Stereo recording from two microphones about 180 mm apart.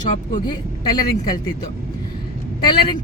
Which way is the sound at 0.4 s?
25° left (ahead or behind).